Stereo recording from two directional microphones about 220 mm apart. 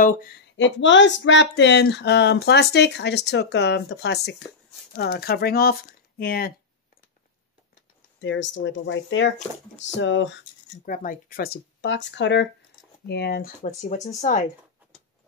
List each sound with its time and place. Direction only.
0.6 s speech: 55° left (ahead or behind)
8.2 s speech: 55° left (ahead or behind)
10.9 s speech: 35° left (ahead or behind)
13.6 s speech: 30° left (ahead or behind)